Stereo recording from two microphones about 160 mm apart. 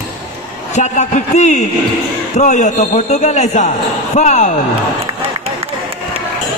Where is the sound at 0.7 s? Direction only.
45° left (ahead or behind).